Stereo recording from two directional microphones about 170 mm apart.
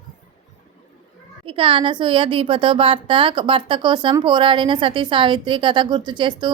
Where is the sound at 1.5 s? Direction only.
30° right (ahead or behind).